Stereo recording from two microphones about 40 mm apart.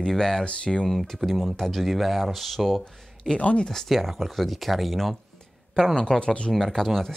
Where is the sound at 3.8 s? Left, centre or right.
Centre.